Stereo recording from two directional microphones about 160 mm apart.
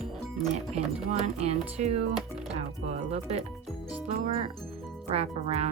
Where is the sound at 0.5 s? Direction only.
40° right (ahead or behind).